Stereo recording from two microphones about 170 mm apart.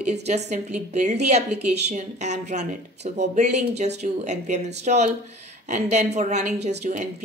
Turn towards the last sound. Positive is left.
turn(degrees=-45)  # may be behind; listen again after turning